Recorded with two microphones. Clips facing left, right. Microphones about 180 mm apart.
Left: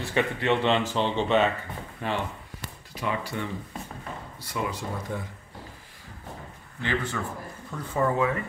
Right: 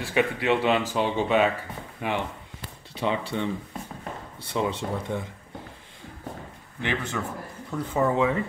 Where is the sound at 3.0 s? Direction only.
25° right (ahead or behind).